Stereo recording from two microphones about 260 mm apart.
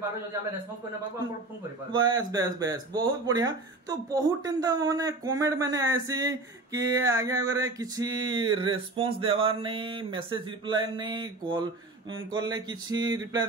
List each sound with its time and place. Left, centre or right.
2.0 s speech: centre